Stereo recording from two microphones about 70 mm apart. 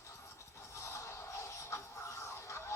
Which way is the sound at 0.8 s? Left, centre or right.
Left.